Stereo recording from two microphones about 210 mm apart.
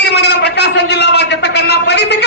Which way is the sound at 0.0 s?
55° left (ahead or behind).